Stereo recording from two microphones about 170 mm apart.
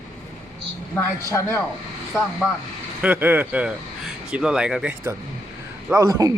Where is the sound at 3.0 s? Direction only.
10° right (ahead or behind).